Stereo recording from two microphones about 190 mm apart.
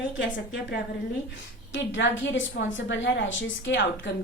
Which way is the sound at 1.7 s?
75° left (ahead or behind).